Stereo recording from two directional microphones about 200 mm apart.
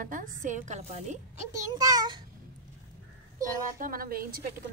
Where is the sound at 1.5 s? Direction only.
20° right (ahead or behind).